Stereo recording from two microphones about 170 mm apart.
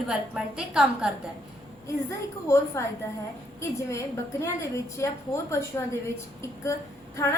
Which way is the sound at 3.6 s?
15° left (ahead or behind).